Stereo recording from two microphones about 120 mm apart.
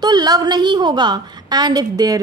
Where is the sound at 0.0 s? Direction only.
35° right (ahead or behind).